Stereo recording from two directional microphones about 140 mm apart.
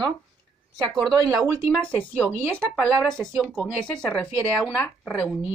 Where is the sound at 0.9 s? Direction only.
Centre (ahead or behind).